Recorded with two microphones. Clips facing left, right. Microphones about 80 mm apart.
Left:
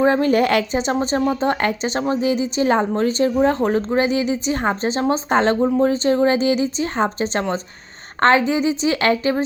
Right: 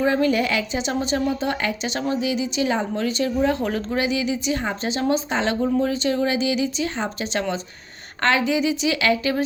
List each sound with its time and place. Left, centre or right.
0.0 s a woman's voice: left